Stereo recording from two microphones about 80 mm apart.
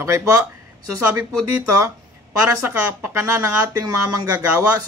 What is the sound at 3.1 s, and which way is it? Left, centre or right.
Speech, right.